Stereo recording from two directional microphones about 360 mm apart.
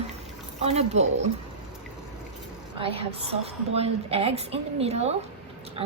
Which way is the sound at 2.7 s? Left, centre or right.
Centre.